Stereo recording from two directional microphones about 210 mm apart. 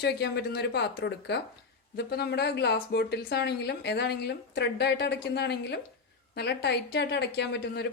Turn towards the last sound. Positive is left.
turn(degrees=50)  # may be behind; listen again after turning